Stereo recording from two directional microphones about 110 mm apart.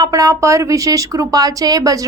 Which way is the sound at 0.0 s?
30° right (ahead or behind).